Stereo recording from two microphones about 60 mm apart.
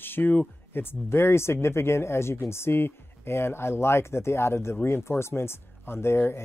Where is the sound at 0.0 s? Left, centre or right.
Left.